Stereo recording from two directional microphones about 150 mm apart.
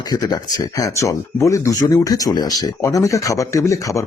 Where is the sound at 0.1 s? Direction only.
25° left (ahead or behind).